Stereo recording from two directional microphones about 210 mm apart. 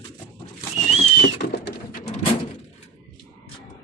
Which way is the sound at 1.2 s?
50° left (ahead or behind).